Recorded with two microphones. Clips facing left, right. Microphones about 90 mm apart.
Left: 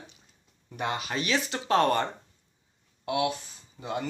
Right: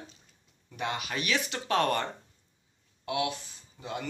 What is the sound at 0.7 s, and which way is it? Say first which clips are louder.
Speech: left 2 dB; 30° left (ahead or behind).